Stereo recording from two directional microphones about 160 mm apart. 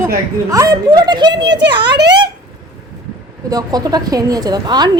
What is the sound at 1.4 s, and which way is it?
Speech, 90° right.